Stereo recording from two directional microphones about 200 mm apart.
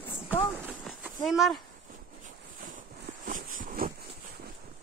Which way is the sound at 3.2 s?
45° right (ahead or behind).